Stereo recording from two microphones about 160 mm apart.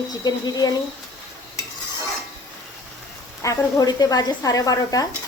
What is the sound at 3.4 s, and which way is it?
A woman's voice, 20° left (ahead or behind).